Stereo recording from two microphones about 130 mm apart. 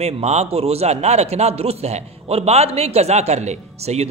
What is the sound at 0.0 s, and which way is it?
A man's voice, 55° right (ahead or behind).